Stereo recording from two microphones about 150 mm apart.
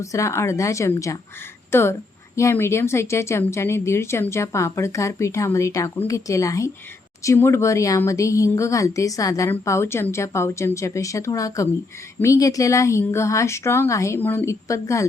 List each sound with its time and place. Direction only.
0.0 s a woman's voice: 20° left (ahead or behind)